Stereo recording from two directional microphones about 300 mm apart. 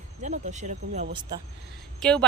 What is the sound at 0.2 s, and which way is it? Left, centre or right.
Speech, right.